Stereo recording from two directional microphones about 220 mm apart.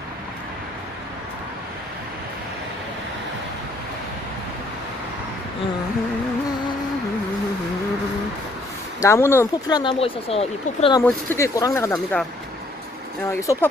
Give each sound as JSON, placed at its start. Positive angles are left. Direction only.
{"t": 9.0, "sound": "speech", "side_deg": 10}
{"t": 11.1, "sound": "speech", "side_deg": 10}
{"t": 13.3, "sound": "speech", "side_deg": 10}